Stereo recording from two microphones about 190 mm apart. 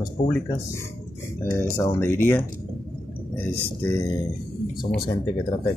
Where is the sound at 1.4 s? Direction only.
10° left (ahead or behind).